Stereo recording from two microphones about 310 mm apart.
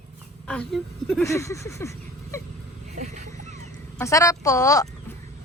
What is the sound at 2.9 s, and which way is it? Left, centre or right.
Boat, right.